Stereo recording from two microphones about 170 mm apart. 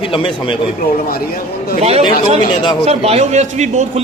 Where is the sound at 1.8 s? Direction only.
35° right (ahead or behind).